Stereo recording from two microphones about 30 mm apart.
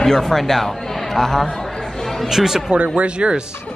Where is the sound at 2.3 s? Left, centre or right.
Centre.